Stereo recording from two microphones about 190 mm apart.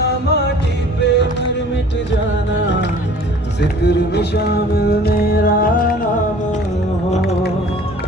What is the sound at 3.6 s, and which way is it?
Music, 60° left (ahead or behind).